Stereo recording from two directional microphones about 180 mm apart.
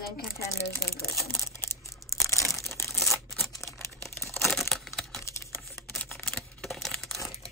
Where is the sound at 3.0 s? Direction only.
Centre (ahead or behind).